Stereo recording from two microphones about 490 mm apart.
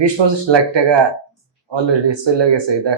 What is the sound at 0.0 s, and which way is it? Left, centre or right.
Speech, right.